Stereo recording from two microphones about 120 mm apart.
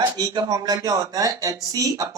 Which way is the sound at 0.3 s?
30° right (ahead or behind).